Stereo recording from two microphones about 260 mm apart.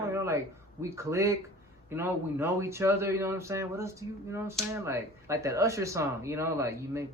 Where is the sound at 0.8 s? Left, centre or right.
Centre.